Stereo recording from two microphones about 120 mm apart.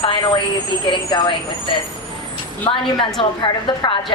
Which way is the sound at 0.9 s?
40° left (ahead or behind).